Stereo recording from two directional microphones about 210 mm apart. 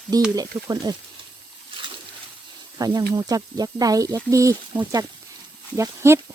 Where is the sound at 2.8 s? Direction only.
20° right (ahead or behind).